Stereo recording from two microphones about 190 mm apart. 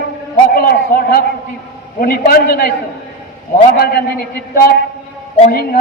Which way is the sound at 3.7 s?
60° left (ahead or behind).